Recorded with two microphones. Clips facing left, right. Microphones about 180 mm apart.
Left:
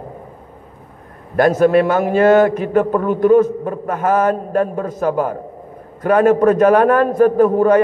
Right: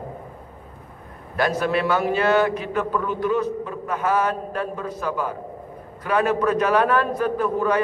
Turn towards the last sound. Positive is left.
turn(degrees=45)  # may be behind; listen again after turning